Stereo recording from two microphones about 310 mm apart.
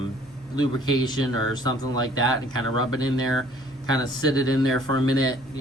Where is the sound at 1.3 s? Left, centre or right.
Right.